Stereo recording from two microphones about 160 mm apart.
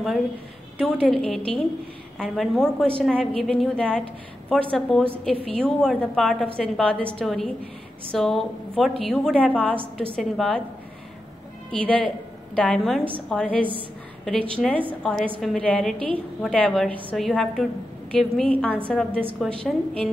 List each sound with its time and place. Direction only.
0.7 s a woman's voice: 5° left (ahead or behind)
11.7 s a woman's voice: 10° left (ahead or behind)